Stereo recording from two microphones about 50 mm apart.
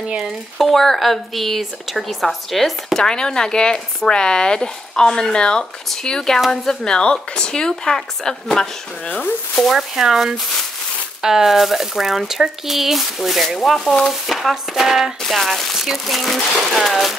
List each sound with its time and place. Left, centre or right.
0.6 s speech: centre
3.0 s speech: centre
9.0 s speech: left
9.6 s speech: centre
14.5 s a sound: centre
15.2 s speech: centre